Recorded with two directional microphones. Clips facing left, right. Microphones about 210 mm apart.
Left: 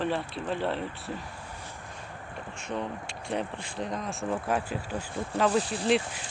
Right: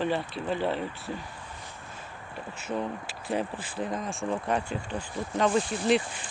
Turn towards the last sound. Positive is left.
turn(degrees=0)  # may be behind; listen again after turning